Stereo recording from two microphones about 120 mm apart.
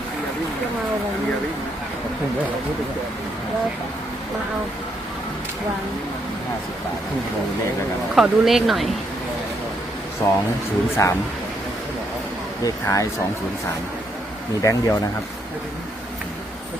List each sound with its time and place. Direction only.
8.1 s speech: centre (ahead or behind)
10.2 s speech: 25° left (ahead or behind)
12.6 s speech: 30° left (ahead or behind)
14.6 s speech: 25° left (ahead or behind)